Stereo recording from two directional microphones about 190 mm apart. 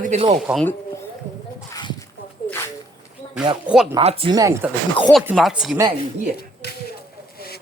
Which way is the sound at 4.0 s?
30° right (ahead or behind).